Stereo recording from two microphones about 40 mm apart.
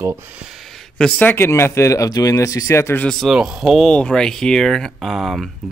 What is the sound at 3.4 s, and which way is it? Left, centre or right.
Speech, centre.